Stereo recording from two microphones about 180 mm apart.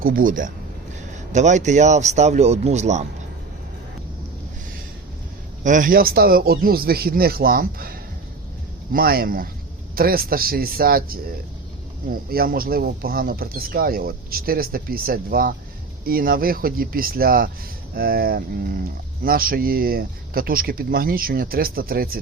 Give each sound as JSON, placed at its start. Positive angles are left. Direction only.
{"t": 0.0, "sound": "a man's voice", "side_deg": -50}
{"t": 5.6, "sound": "speech", "side_deg": -45}